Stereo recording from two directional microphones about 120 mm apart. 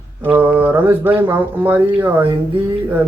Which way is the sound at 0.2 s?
15° right (ahead or behind).